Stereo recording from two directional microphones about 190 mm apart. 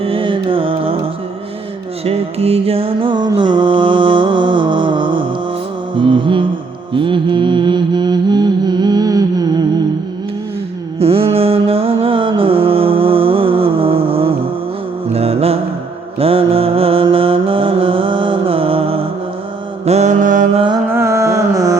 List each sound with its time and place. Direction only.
0.0 s music: 30° right (ahead or behind)
2.0 s music: 30° right (ahead or behind)
11.0 s mantra: 30° right (ahead or behind)
15.0 s music: 30° right (ahead or behind)
16.1 s mantra: 30° right (ahead or behind)
20.9 s carnatic music: 15° right (ahead or behind)